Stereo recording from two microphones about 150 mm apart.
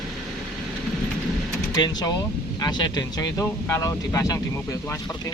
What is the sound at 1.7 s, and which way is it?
A man's voice, 25° left (ahead or behind).